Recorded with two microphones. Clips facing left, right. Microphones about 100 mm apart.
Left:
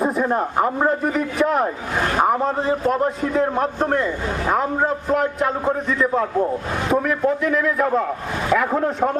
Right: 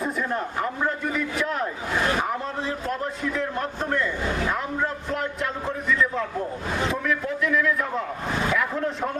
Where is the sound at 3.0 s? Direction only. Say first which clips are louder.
Left 8 dB; 40° left (ahead or behind).